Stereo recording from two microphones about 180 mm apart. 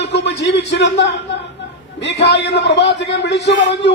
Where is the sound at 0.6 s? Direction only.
75° left (ahead or behind).